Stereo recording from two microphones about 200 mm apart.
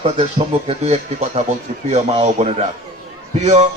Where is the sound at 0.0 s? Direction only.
30° right (ahead or behind).